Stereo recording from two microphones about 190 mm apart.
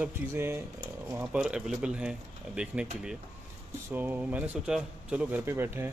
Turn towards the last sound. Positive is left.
turn(degrees=-10)  # may be behind; listen again after turning